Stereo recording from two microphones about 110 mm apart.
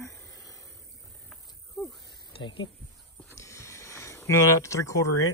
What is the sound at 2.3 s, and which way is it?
Speech, 50° left (ahead or behind).